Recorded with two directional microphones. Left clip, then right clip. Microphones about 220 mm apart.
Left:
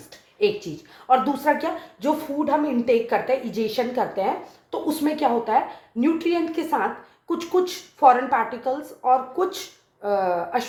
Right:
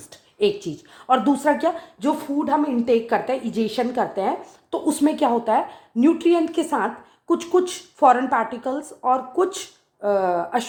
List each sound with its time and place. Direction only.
1.0 s a woman's voice: 50° right (ahead or behind)